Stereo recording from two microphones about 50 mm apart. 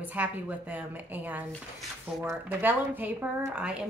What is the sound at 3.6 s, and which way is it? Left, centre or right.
Speech, right.